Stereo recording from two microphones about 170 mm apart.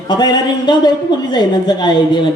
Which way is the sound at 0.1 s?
25° left (ahead or behind).